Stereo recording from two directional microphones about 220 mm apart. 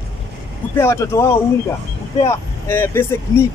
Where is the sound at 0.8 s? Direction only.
10° left (ahead or behind).